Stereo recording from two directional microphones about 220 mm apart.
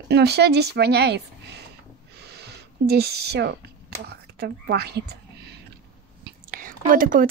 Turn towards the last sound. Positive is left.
turn(degrees=-40)  # may be behind; listen again after turning